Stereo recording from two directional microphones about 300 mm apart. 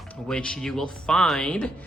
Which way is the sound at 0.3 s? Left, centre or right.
Centre.